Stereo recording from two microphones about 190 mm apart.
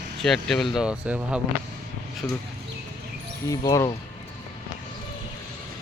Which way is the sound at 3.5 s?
15° left (ahead or behind).